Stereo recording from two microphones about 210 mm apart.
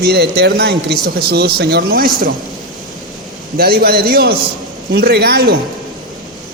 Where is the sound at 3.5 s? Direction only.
45° right (ahead or behind).